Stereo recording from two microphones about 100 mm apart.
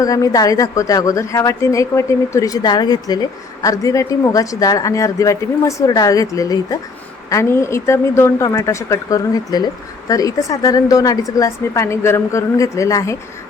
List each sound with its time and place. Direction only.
0.0 s a woman's voice: 35° left (ahead or behind)